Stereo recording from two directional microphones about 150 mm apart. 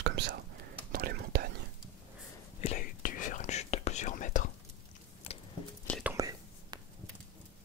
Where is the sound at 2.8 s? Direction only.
65° left (ahead or behind).